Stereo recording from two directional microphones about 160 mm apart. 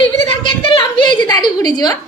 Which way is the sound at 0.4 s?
35° left (ahead or behind).